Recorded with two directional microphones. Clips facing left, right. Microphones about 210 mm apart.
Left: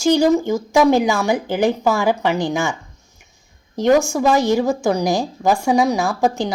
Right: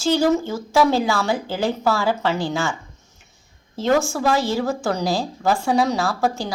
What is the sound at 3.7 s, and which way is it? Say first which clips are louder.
Speech: left 4 dB; 15° left (ahead or behind).